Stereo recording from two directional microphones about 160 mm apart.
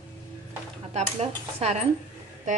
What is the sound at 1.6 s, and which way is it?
Speech, 45° right (ahead or behind).